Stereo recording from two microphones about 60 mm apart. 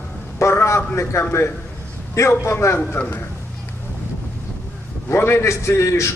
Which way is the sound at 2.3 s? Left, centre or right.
Left.